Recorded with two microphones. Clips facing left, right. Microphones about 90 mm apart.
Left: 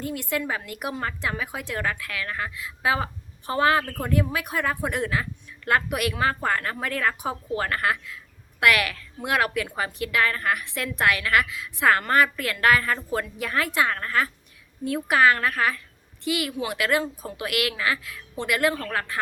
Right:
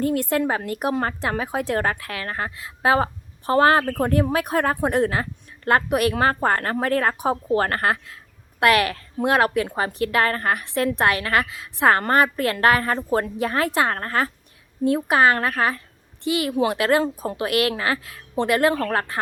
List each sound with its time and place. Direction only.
0.0 s speech: 45° right (ahead or behind)
14.8 s speech: 30° right (ahead or behind)